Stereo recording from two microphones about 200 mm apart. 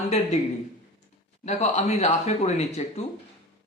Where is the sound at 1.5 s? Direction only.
30° left (ahead or behind).